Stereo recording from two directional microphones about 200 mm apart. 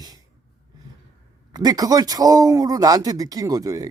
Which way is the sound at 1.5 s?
20° right (ahead or behind).